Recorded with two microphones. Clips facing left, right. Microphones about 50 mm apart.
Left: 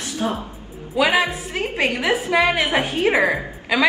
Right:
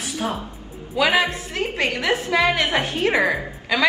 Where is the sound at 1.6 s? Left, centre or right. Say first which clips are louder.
Left 2 dB; left.